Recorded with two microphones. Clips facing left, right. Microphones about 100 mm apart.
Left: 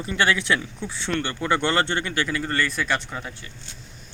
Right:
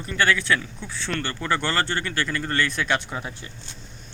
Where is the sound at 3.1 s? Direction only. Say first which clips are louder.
Right 2 dB; 15° right (ahead or behind).